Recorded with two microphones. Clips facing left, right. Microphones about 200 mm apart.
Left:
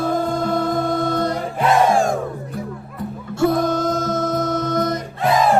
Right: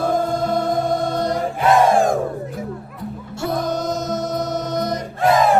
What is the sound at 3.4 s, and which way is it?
Music, 50° left (ahead or behind).